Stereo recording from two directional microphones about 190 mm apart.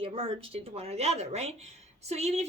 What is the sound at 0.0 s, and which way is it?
A woman's voice, 30° right (ahead or behind).